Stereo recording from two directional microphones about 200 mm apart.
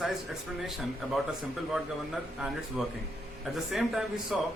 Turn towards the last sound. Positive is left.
turn(degrees=0)  # may be behind; listen again after turning